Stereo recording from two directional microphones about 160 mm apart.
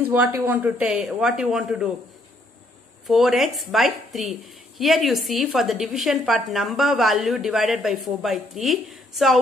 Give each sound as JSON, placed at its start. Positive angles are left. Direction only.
{"t": 0.0, "sound": "a woman's voice", "side_deg": -10}
{"t": 3.1, "sound": "a woman's voice", "side_deg": 0}